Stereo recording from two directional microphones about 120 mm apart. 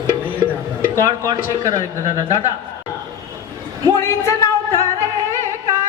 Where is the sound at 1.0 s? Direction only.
30° right (ahead or behind).